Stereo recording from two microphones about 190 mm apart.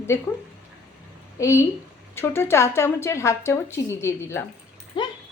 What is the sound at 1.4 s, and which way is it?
Speech, 15° left (ahead or behind).